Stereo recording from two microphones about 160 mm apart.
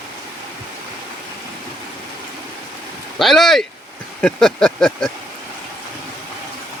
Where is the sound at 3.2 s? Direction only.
Centre (ahead or behind).